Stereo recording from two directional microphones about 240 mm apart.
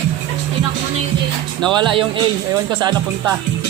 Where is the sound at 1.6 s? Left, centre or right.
Centre.